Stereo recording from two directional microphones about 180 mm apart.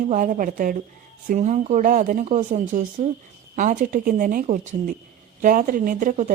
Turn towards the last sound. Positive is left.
turn(degrees=-45)  # may be behind; listen again after turning